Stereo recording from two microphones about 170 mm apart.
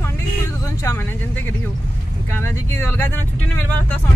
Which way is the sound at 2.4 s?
10° left (ahead or behind).